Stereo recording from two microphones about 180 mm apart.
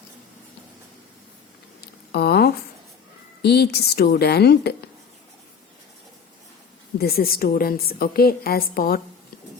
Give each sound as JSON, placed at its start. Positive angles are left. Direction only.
{"t": 1.8, "sound": "a sound", "side_deg": 65}
{"t": 3.4, "sound": "a woman's voice", "side_deg": 65}
{"t": 7.0, "sound": "a woman's voice", "side_deg": 55}